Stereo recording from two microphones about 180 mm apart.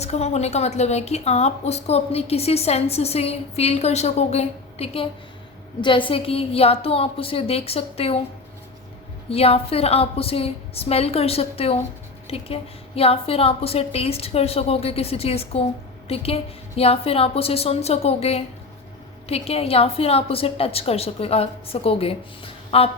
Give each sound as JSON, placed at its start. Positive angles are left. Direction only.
{"t": 0.0, "sound": "a woman's voice", "side_deg": 35}
{"t": 6.1, "sound": "a woman's voice", "side_deg": 30}
{"t": 9.3, "sound": "a woman's voice", "side_deg": 35}